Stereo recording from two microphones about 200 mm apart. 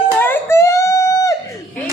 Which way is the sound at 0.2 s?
10° left (ahead or behind).